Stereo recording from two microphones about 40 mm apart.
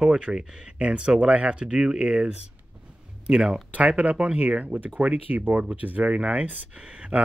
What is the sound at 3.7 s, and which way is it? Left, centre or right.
Speech, right.